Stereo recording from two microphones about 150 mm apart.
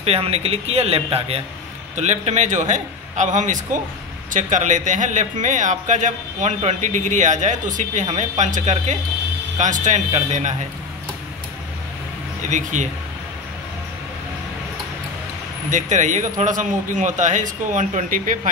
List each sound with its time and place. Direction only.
0.0 s speech: 40° right (ahead or behind)
12.4 s speech: 55° right (ahead or behind)
15.7 s speech: 55° right (ahead or behind)